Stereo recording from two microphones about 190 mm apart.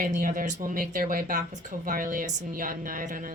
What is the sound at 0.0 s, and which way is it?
A woman's voice, 45° right (ahead or behind).